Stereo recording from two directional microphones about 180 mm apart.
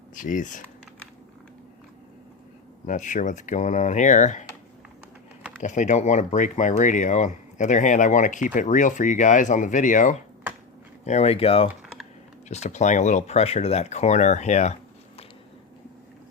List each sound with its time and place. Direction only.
0.1 s speech: 45° left (ahead or behind)
2.8 s speech: 45° left (ahead or behind)
5.6 s speech: 40° left (ahead or behind)